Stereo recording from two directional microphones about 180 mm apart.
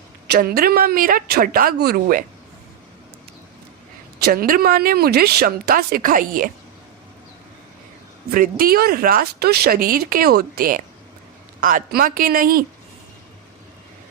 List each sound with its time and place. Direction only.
0.3 s speech: 60° right (ahead or behind)
4.2 s speech: 55° right (ahead or behind)
8.3 s speech: 55° right (ahead or behind)